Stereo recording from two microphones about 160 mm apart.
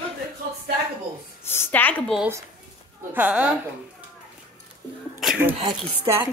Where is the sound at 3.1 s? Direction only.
10° right (ahead or behind).